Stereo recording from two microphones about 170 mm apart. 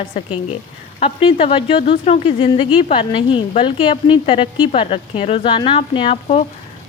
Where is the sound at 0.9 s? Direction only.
35° left (ahead or behind).